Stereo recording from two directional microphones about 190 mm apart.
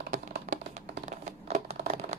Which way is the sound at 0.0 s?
50° right (ahead or behind).